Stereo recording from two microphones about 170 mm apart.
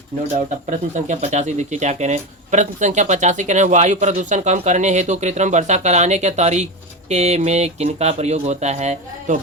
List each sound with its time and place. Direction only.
0.3 s speech: 45° right (ahead or behind)